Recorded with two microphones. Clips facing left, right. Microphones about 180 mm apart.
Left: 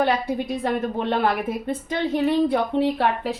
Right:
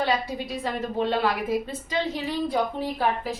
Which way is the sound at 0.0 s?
55° left (ahead or behind).